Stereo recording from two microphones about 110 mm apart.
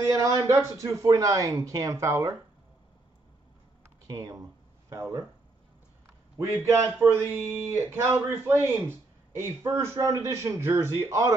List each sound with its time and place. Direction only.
0.0 s speech: 30° right (ahead or behind)
4.1 s speech: 35° right (ahead or behind)
6.6 s speech: 25° right (ahead or behind)